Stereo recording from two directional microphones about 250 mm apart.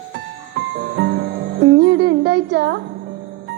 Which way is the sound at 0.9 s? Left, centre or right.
Right.